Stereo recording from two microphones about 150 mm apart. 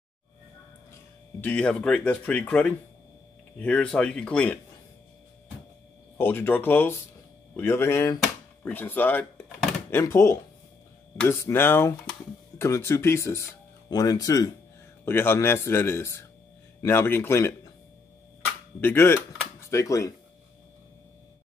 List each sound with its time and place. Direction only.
1.4 s speech: 10° left (ahead or behind)
6.1 s a man's voice: 15° left (ahead or behind)
18.8 s speech: 15° left (ahead or behind)